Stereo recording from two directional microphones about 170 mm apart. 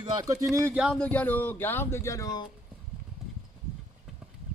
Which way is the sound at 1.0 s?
10° left (ahead or behind).